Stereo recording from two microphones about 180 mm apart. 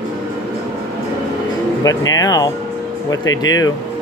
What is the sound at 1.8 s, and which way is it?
Speech, 20° left (ahead or behind).